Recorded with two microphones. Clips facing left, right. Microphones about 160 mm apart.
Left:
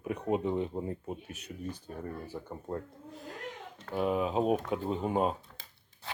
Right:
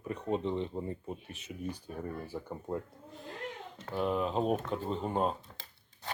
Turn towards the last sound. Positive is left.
turn(degrees=-20)  # may be behind; listen again after turning